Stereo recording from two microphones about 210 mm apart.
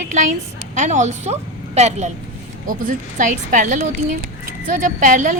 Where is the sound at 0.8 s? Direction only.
35° right (ahead or behind).